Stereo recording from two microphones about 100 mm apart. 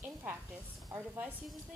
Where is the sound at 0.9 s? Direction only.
20° right (ahead or behind).